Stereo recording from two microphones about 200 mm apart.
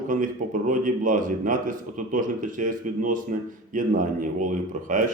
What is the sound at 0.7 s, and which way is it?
A man's voice, 40° right (ahead or behind).